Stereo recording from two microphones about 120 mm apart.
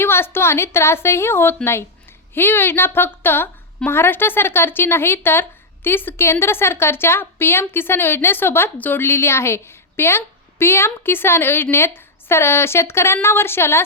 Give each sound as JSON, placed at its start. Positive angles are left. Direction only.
{"t": 0.0, "sound": "speech", "side_deg": 20}